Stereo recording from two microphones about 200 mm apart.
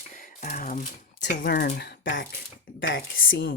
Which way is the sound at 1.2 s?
55° left (ahead or behind).